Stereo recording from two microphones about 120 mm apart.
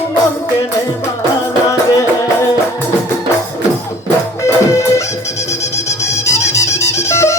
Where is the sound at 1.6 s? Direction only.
25° left (ahead or behind).